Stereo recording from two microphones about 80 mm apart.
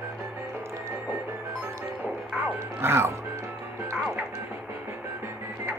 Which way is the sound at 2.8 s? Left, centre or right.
Right.